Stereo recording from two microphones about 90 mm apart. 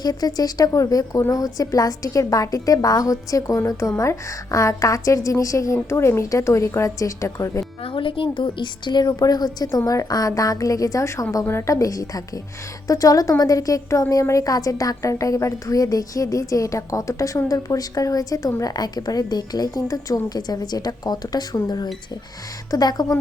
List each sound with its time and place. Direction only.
0.0 s a woman's voice: 45° left (ahead or behind)
7.9 s a woman's voice: 70° left (ahead or behind); by 23.1 s 50° left (ahead or behind)